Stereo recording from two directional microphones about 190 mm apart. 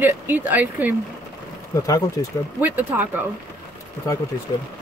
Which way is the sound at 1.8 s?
20° left (ahead or behind).